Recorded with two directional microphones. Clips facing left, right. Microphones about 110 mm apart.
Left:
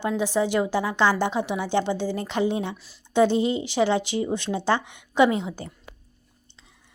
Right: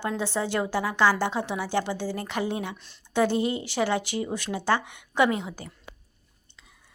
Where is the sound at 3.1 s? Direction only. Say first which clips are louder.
Left 4 dB; 20° left (ahead or behind).